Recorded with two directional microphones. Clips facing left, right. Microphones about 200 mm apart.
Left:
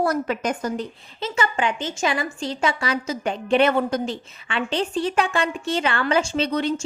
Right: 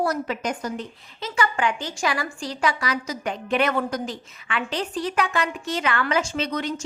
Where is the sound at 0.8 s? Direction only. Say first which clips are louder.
Left 4 dB; 25° left (ahead or behind).